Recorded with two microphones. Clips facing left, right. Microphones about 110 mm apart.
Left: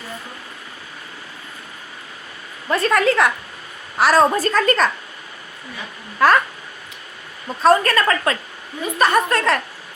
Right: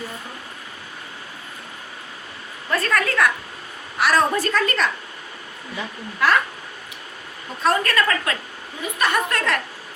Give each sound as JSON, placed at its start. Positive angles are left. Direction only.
{"t": 2.6, "sound": "a woman's voice", "side_deg": 20}
{"t": 3.9, "sound": "a woman's voice", "side_deg": 35}
{"t": 6.1, "sound": "speech", "side_deg": 40}
{"t": 7.6, "sound": "a woman's voice", "side_deg": 40}